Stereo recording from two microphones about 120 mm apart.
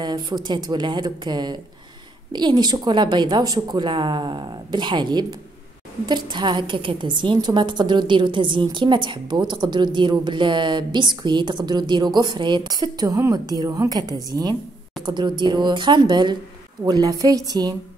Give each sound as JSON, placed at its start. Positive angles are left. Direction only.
{"t": 0.0, "sound": "a woman's voice", "side_deg": -35}